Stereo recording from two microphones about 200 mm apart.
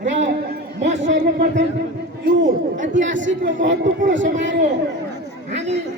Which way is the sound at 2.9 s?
65° right (ahead or behind).